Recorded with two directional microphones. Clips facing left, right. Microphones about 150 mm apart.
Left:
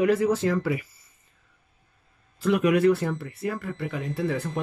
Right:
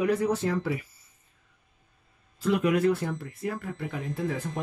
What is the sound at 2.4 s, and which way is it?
Speech, 75° left (ahead or behind).